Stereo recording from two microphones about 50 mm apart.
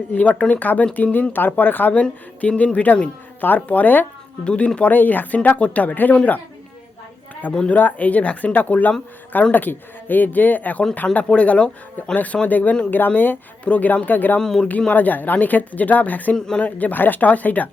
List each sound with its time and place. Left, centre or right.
0.1 s speech: left
1.9 s speech: left
4.4 s speech: left
7.7 s speech: left
14.3 s speech: centre
14.8 s speech: left
16.3 s speech: centre
16.6 s speech: left